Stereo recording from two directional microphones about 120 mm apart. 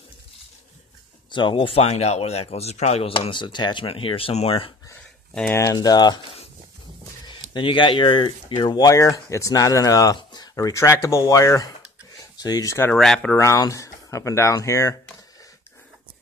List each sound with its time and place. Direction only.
1.3 s speech: 45° left (ahead or behind)
1.9 s speech: 60° left (ahead or behind)
5.5 s speech: 25° left (ahead or behind)
7.5 s speech: 45° left (ahead or behind)
12.9 s speech: 5° left (ahead or behind)
13.4 s speech: 25° left (ahead or behind)